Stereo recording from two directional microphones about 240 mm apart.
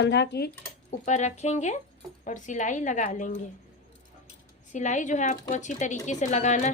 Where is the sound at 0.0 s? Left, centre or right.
Left.